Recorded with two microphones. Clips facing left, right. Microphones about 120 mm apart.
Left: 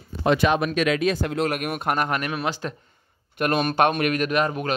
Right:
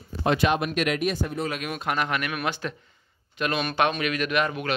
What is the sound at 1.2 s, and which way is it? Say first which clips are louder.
Speech: left 5 dB; 80° left.